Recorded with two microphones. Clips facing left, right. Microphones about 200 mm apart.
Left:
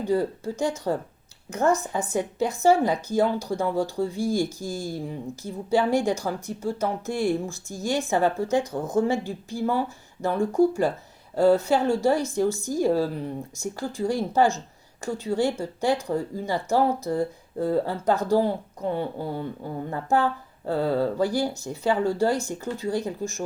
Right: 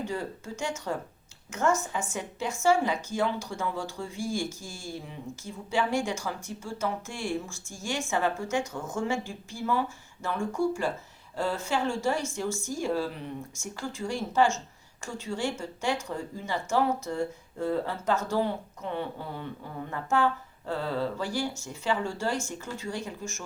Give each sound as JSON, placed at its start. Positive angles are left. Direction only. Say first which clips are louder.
{"t": 0.1, "sound": "speech", "louder": "left 10 dB", "side_deg": 35}